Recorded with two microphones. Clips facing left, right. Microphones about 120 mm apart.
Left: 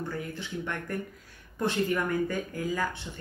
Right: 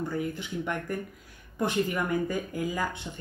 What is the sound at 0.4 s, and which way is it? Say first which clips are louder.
Speech: right 2 dB; 15° right (ahead or behind).